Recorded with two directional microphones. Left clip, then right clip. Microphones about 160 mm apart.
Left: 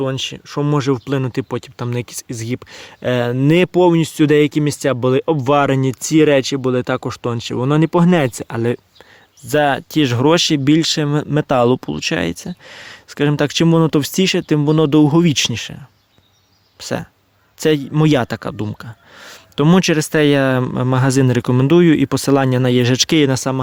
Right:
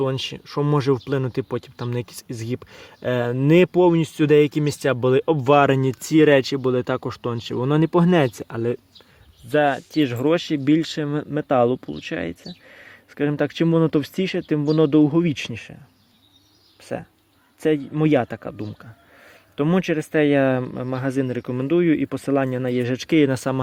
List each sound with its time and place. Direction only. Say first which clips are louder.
0.0 s speech: left 3 dB; 10° left (ahead or behind)
8.4 s speech: left 5 dB; 35° left (ahead or behind)
9.5 s speech: left 4 dB; 80° left; by 15.7 s 45° left (ahead or behind)
16.8 s speech: left 7 dB; 55° left (ahead or behind)